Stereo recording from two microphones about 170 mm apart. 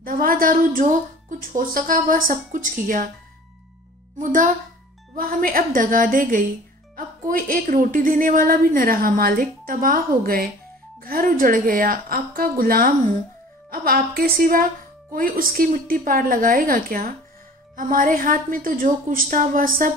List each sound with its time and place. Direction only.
0.0 s a woman's voice: 55° right (ahead or behind)
4.2 s a woman's voice: 50° right (ahead or behind)